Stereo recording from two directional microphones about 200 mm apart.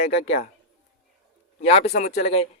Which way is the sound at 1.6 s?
30° left (ahead or behind).